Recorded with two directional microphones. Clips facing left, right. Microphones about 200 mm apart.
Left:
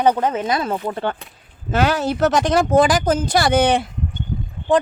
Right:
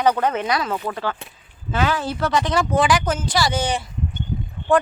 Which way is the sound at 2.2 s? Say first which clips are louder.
Left 5 dB; 45° left (ahead or behind).